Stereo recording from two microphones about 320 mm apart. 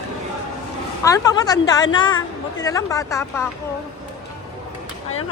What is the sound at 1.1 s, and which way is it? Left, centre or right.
A woman's voice, centre.